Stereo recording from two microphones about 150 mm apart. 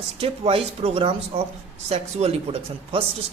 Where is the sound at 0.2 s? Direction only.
40° right (ahead or behind).